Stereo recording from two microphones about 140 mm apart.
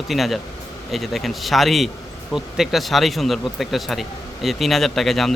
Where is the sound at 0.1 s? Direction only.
Centre (ahead or behind).